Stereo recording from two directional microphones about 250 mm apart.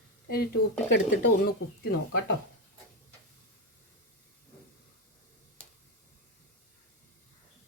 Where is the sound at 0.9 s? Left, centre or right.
Left.